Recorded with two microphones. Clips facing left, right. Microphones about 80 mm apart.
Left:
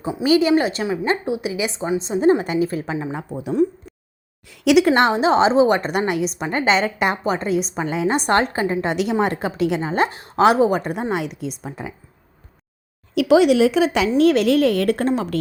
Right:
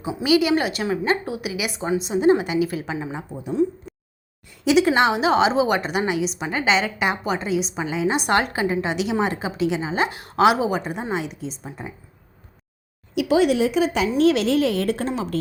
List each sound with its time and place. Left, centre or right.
0.3 s a woman's voice: left
3.2 s a woman's voice: left
5.1 s a woman's voice: left
6.1 s a woman's voice: left
10.2 s a woman's voice: left
13.2 s speech: left
14.2 s a woman's voice: left